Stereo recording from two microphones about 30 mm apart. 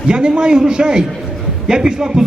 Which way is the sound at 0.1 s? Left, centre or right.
Right.